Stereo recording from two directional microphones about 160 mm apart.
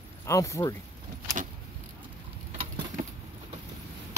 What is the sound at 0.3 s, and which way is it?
Speech, 20° left (ahead or behind).